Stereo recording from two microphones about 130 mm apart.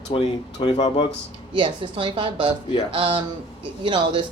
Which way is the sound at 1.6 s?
40° right (ahead or behind).